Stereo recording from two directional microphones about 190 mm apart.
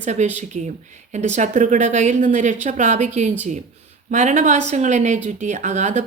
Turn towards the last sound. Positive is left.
turn(degrees=-40)  # may be behind; listen again after turning